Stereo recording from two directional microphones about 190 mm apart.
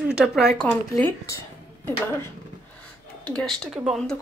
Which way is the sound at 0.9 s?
15° left (ahead or behind).